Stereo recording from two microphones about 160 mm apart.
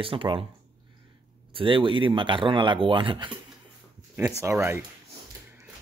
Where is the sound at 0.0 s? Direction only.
35° right (ahead or behind).